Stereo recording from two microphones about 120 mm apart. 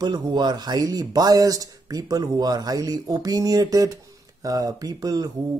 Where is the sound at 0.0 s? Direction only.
35° right (ahead or behind).